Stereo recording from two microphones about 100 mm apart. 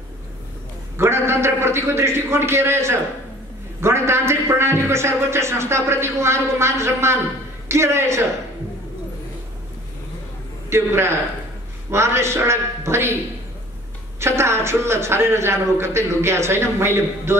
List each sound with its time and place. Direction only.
0.9 s a man's voice: 25° right (ahead or behind)
10.7 s a man's voice: 25° right (ahead or behind)
14.2 s a man's voice: 25° right (ahead or behind)